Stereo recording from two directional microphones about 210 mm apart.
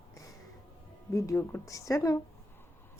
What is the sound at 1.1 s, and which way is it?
Speech, 15° left (ahead or behind).